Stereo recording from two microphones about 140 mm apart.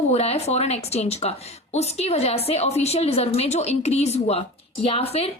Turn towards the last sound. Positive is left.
turn(degrees=45)  # may be behind; listen again after turning